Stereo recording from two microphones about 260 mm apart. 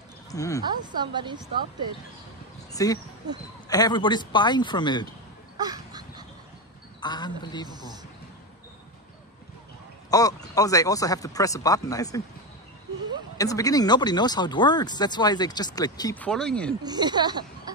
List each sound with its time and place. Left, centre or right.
0.3 s speech: centre
0.7 s a woman's voice: centre
2.7 s speech: centre
5.6 s a sound: centre
7.0 s speech: centre
7.6 s a woman's voice: centre
10.1 s speech: centre
13.4 s speech: centre
16.8 s speech: centre